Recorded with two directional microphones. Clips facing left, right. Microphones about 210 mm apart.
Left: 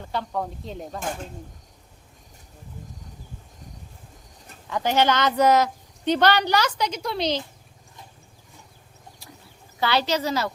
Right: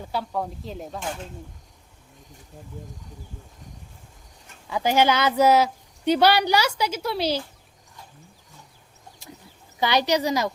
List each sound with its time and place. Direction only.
0.0 s speech: 5° right (ahead or behind)
4.7 s speech: 10° right (ahead or behind)
9.8 s speech: 15° right (ahead or behind)